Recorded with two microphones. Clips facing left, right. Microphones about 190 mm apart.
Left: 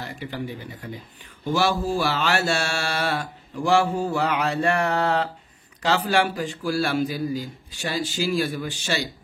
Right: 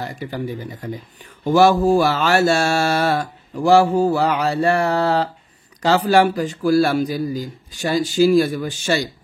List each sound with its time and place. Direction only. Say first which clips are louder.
0.0 s mantra: right 5 dB; 40° right (ahead or behind)
5.8 s a man's voice: right 7 dB; 40° right (ahead or behind)